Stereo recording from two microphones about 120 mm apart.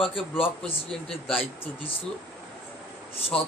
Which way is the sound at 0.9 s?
5° left (ahead or behind).